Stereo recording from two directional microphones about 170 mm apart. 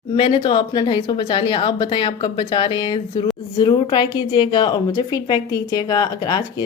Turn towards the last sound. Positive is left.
turn(degrees=25)  # may be behind; listen again after turning